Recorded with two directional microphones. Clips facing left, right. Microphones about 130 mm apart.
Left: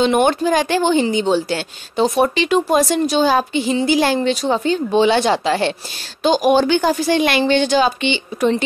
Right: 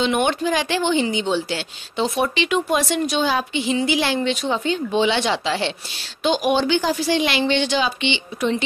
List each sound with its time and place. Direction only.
0.0 s a woman's voice: 40° left (ahead or behind)